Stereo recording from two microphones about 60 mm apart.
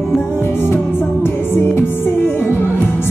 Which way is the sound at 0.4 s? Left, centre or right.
Left.